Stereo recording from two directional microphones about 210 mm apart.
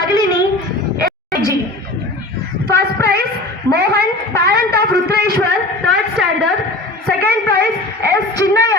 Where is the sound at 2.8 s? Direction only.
50° right (ahead or behind).